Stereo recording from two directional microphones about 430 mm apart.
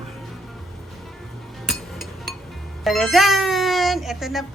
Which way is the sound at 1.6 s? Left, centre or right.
Centre.